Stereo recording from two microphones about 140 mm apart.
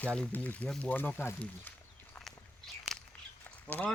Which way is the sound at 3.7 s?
10° left (ahead or behind).